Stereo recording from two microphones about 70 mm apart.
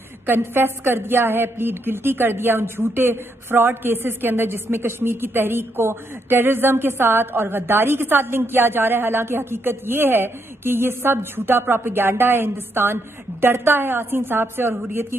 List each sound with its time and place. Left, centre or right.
0.3 s a woman's voice: right